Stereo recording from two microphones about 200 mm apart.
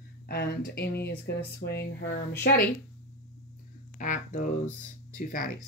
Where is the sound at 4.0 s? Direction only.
40° left (ahead or behind).